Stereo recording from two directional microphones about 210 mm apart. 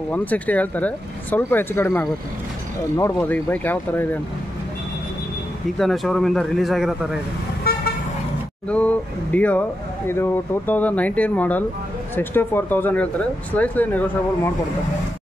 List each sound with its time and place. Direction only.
0.1 s speech: 10° left (ahead or behind)
5.8 s a man's voice: centre (ahead or behind)
8.6 s speech: 5° left (ahead or behind)